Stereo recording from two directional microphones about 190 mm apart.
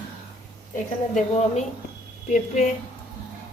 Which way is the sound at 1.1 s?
40° left (ahead or behind).